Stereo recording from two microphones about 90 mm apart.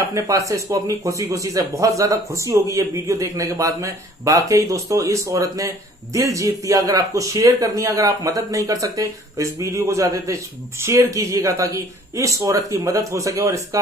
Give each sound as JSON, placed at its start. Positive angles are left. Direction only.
{"t": 0.1, "sound": "speech", "side_deg": -40}